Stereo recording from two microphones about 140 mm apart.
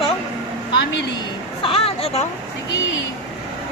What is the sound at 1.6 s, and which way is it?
Speech, 40° left (ahead or behind).